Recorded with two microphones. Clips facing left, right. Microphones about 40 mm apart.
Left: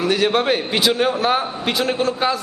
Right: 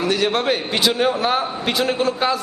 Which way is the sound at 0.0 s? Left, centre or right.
Centre.